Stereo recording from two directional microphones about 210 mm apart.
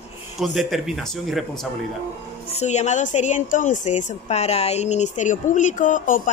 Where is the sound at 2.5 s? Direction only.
30° left (ahead or behind).